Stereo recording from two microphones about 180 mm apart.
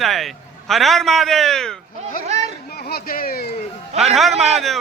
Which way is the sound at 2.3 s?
40° right (ahead or behind).